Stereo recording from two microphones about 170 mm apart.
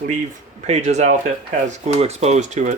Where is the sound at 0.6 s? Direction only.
40° right (ahead or behind).